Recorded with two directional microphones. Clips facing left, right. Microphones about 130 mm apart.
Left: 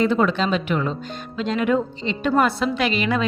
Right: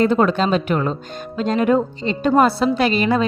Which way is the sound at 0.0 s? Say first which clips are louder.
Right 3 dB; 45° right (ahead or behind).